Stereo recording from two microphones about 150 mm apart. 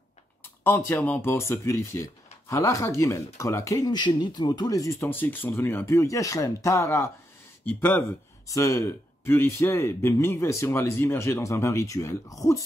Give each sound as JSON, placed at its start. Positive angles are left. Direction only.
{"t": 0.7, "sound": "speech", "side_deg": 15}